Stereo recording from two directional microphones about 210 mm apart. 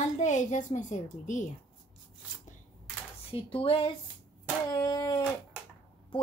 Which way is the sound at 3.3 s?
25° left (ahead or behind).